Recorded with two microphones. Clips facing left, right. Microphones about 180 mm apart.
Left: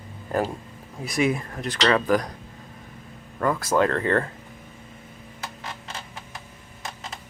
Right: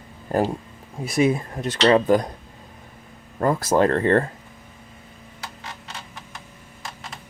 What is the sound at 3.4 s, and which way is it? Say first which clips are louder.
Speech: right 3 dB; 35° right (ahead or behind).